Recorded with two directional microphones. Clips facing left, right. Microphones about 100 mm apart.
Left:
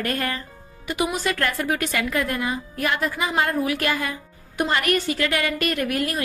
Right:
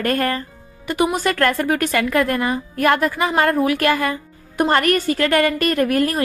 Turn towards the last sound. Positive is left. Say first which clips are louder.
# right 7 dB
turn(degrees=-40)  # may be behind; listen again after turning